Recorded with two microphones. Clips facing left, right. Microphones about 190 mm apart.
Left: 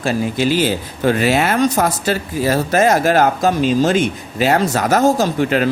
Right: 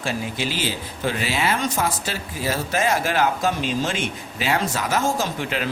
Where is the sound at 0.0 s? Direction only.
40° left (ahead or behind).